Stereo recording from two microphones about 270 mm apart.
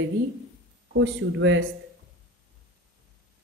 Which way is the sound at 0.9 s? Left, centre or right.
Right.